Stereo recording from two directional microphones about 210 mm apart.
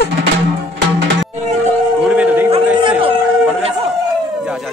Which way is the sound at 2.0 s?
5° right (ahead or behind).